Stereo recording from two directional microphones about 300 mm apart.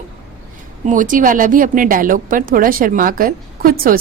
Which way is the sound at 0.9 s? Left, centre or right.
Right.